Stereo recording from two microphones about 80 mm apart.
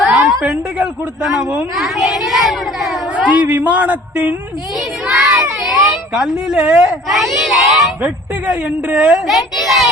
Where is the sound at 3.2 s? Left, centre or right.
Centre.